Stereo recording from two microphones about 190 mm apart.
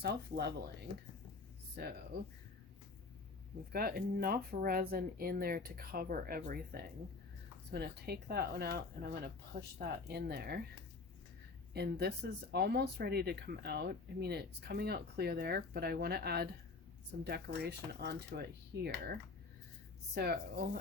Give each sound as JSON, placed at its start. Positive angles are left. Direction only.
{"t": 0.0, "sound": "speech", "side_deg": -60}
{"t": 1.7, "sound": "speech", "side_deg": -55}
{"t": 3.7, "sound": "speech", "side_deg": -50}
{"t": 11.7, "sound": "speech", "side_deg": -60}
{"t": 20.1, "sound": "speech", "side_deg": -55}